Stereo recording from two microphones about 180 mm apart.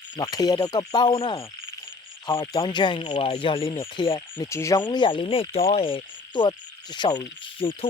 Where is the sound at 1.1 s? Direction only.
30° left (ahead or behind).